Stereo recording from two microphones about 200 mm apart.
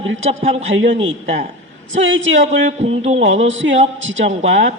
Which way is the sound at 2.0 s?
75° right (ahead or behind).